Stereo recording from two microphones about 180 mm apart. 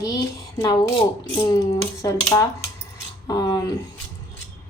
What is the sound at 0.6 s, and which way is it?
Speech, 20° left (ahead or behind).